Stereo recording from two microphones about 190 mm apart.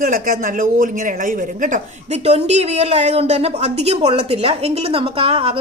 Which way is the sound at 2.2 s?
35° right (ahead or behind).